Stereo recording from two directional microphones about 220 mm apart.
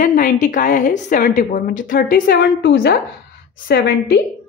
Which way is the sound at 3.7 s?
45° left (ahead or behind).